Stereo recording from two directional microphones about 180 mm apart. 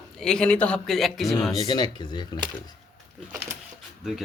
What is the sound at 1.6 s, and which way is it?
Speech, 20° left (ahead or behind).